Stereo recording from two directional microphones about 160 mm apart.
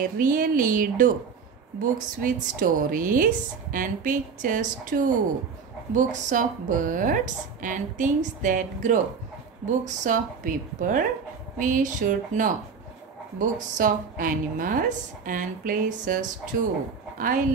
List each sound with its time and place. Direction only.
0.0 s a woman's voice: 60° right (ahead or behind)